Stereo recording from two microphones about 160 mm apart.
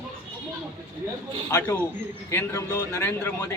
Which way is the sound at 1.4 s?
15° left (ahead or behind).